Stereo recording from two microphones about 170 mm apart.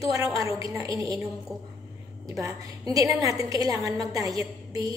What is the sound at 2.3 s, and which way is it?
A woman's voice, 20° right (ahead or behind).